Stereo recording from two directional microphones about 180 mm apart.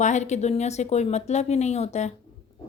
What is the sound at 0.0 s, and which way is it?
Speech, 40° left (ahead or behind).